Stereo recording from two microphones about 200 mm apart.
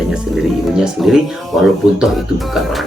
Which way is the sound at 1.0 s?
Centre (ahead or behind).